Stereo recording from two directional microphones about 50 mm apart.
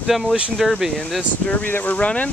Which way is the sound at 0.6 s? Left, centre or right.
Centre.